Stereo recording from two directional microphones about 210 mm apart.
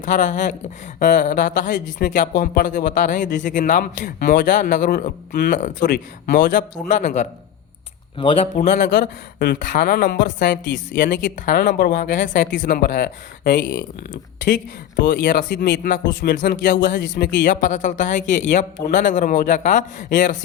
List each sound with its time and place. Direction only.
0.0 s speech: 35° left (ahead or behind)
8.5 s speech: 35° left (ahead or behind)
9.0 s speech: 55° left (ahead or behind)
15.0 s speech: 55° left (ahead or behind)
15.9 s speech: 40° left (ahead or behind)
17.0 s speech: 60° left (ahead or behind)
17.4 s speech: 40° left (ahead or behind)